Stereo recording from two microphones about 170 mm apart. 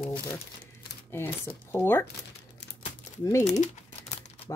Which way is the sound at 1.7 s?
15° left (ahead or behind).